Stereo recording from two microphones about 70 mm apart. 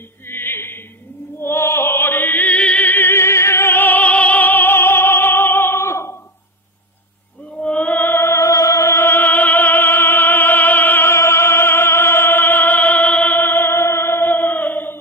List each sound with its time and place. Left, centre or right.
0.3 s opera: left
7.5 s chant: centre
8.0 s music: left